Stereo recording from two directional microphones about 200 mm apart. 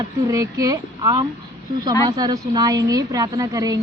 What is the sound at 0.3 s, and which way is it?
A woman's voice, 15° right (ahead or behind).